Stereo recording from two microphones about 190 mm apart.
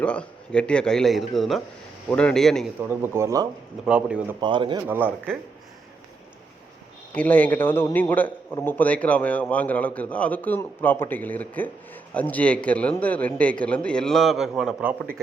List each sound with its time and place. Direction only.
0.0 s a man's voice: 5° left (ahead or behind)
3.0 s a man's voice: 15° right (ahead or behind)
4.4 s speech: 25° right (ahead or behind)
4.9 s a man's voice: 10° right (ahead or behind)
7.1 s a man's voice: 10° left (ahead or behind)